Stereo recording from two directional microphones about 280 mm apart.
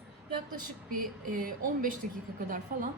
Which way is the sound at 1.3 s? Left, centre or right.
Right.